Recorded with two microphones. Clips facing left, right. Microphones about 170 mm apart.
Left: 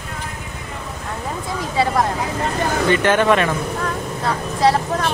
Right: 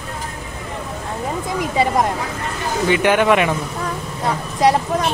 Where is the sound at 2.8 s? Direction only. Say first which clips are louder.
Right 1 dB; 15° right (ahead or behind).